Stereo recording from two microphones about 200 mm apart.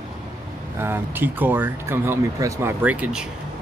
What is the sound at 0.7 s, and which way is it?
Speech, 10° right (ahead or behind).